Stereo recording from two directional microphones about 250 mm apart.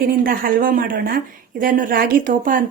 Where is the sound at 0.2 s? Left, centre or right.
Right.